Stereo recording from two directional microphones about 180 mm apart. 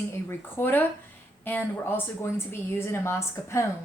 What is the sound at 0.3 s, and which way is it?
A woman's voice, 10° left (ahead or behind).